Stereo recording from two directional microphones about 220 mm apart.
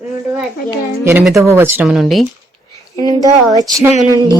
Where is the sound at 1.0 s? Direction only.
10° right (ahead or behind).